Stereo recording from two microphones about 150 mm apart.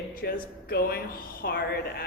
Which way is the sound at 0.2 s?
90° left.